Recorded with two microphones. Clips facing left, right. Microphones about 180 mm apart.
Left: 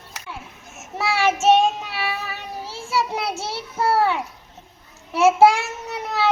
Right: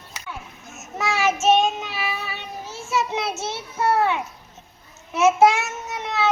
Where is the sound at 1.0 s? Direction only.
30° left (ahead or behind).